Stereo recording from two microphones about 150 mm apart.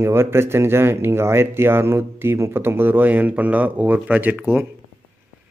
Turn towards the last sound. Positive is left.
turn(degrees=-10)  # may be behind; listen again after turning